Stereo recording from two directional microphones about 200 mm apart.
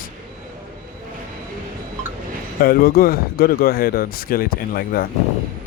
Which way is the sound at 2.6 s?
50° left (ahead or behind).